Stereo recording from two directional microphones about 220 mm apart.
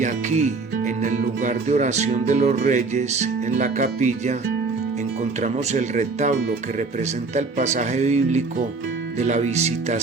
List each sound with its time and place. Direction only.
0.0 s speech: 30° right (ahead or behind)
5.4 s speech: 30° right (ahead or behind)